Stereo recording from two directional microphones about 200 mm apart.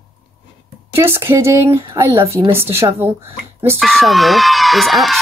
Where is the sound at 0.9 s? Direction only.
10° right (ahead or behind).